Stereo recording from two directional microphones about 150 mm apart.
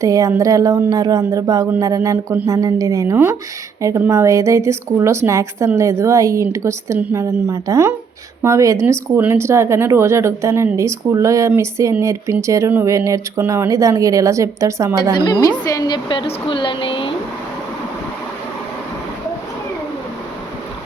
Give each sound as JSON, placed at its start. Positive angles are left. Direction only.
{"t": 0.0, "sound": "speech", "side_deg": -20}
{"t": 15.1, "sound": "a woman's voice", "side_deg": 30}